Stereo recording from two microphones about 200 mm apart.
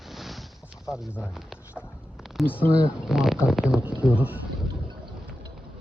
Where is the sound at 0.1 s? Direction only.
Centre (ahead or behind).